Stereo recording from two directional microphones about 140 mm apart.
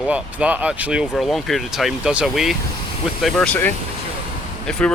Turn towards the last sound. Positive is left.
turn(degrees=5)  # may be behind; listen again after turning